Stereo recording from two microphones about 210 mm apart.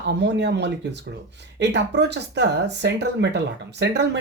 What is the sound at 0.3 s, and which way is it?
Speech, 55° right (ahead or behind).